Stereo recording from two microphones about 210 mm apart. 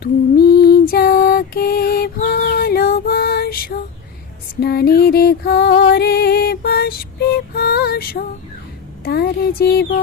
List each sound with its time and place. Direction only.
0.0 s lullaby: 50° left (ahead or behind)
4.6 s music: 50° left (ahead or behind)
9.0 s a sound: 50° left (ahead or behind)